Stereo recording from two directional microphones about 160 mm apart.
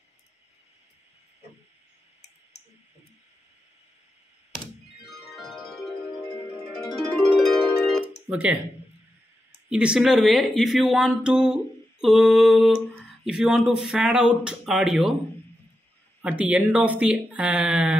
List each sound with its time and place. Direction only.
5.0 s music: centre (ahead or behind)
7.0 s music: centre (ahead or behind)
8.3 s speech: 5° right (ahead or behind)
9.7 s speech: 5° right (ahead or behind)
16.2 s speech: 10° right (ahead or behind)